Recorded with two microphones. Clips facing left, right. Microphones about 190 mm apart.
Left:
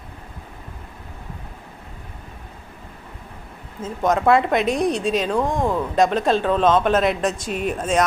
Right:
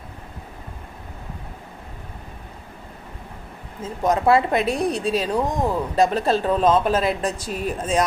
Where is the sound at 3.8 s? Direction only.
30° right (ahead or behind).